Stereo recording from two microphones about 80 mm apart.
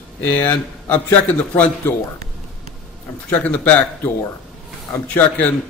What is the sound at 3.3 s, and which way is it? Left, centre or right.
A man's voice, centre.